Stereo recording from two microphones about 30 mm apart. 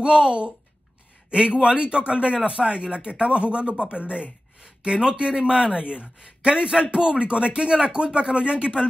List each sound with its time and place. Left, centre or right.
0.0 s speech: right
1.6 s speech: right